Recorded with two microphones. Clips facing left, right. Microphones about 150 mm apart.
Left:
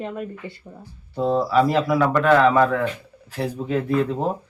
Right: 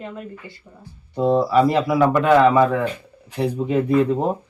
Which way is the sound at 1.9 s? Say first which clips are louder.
Right 2 dB; 15° right (ahead or behind).